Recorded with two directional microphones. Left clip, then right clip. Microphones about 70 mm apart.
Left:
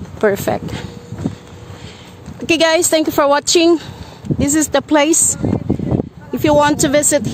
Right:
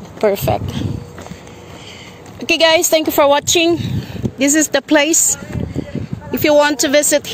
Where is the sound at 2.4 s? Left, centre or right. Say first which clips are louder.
Right 1 dB; left.